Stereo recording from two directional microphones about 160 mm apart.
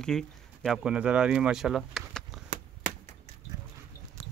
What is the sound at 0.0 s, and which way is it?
Speech, 5° left (ahead or behind).